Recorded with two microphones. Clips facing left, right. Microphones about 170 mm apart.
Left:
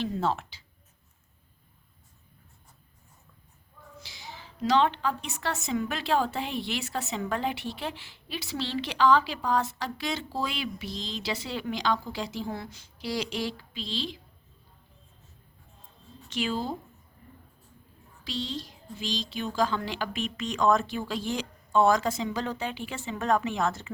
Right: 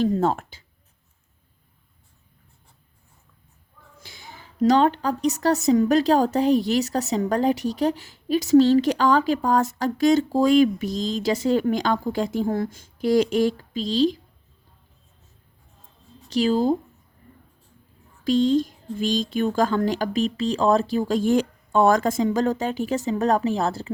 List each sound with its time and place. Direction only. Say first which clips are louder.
0.0 s speech: right 8 dB; 45° right (ahead or behind)
4.0 s a woman's voice: right 2 dB; 50° right (ahead or behind)
16.3 s speech: right 11 dB; 40° right (ahead or behind)
18.3 s a woman's voice: right 16 dB; 50° right (ahead or behind)